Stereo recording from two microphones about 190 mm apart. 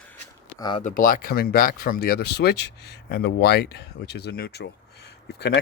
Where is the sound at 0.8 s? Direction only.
45° left (ahead or behind).